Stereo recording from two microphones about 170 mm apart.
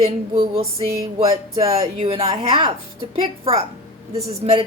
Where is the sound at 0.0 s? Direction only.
35° right (ahead or behind).